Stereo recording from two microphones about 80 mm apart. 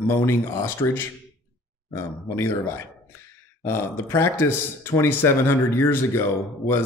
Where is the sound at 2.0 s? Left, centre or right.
Left.